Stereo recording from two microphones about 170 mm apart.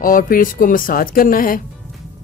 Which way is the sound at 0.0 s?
55° left (ahead or behind).